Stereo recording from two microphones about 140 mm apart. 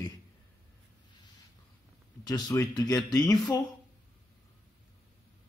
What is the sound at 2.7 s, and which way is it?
Speech, 25° left (ahead or behind).